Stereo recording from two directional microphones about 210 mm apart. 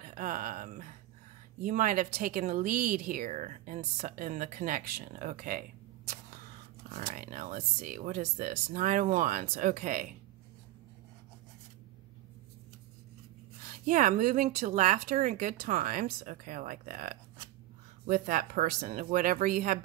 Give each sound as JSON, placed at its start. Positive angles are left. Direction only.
{"t": 0.0, "sound": "a sound", "side_deg": -40}
{"t": 1.6, "sound": "speech", "side_deg": -40}
{"t": 7.0, "sound": "speech", "side_deg": -40}
{"t": 13.8, "sound": "speech", "side_deg": -40}